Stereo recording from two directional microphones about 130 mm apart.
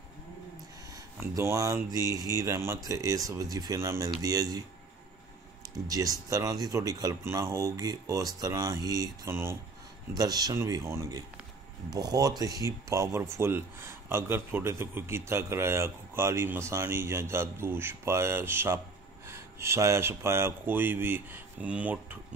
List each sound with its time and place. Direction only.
0.9 s speech: 25° right (ahead or behind)
10.1 s speech: 30° right (ahead or behind); by 22.2 s 10° right (ahead or behind)